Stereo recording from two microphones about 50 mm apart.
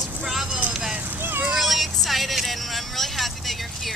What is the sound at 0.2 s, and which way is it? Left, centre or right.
Vehicle, centre.